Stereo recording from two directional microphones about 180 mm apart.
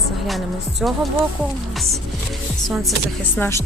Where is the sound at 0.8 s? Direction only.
5° right (ahead or behind).